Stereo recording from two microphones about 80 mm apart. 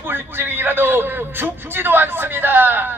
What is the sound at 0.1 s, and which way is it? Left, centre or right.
Speech, right.